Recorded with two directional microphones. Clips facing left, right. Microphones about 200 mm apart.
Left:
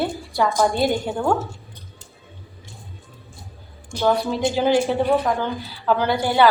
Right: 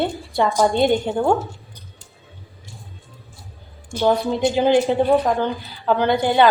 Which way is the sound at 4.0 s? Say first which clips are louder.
Right 2 dB; 20° right (ahead or behind).